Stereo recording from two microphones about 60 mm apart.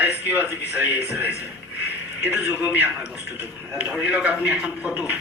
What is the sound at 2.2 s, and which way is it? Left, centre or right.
Music, right.